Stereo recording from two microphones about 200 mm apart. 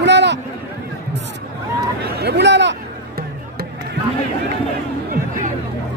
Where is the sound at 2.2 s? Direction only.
55° right (ahead or behind).